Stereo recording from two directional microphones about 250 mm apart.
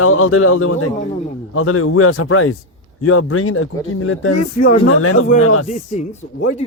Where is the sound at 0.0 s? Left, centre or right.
Left.